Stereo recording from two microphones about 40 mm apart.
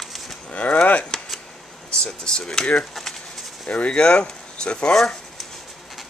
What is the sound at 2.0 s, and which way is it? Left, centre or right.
Speech, centre.